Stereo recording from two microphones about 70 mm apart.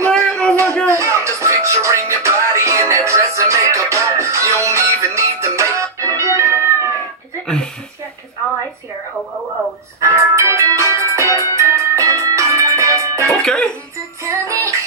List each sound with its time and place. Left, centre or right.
0.1 s a sound: centre
0.8 s music: right
9.9 s music: right
13.3 s music: centre
14.2 s music: right